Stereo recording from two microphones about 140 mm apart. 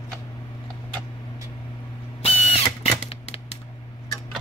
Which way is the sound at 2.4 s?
50° left (ahead or behind).